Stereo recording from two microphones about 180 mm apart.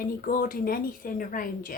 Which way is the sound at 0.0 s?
50° left (ahead or behind).